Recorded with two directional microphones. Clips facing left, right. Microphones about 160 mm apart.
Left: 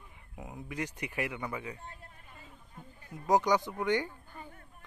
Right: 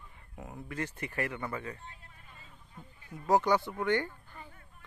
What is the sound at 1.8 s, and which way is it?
Speech, 45° left (ahead or behind).